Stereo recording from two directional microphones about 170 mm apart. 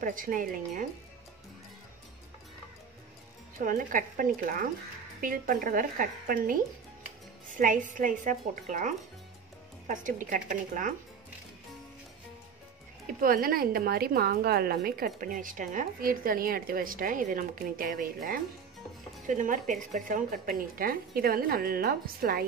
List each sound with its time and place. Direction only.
0.0 s a woman's voice: 55° right (ahead or behind)
3.5 s a woman's voice: 50° right (ahead or behind)
13.2 s a woman's voice: 55° right (ahead or behind)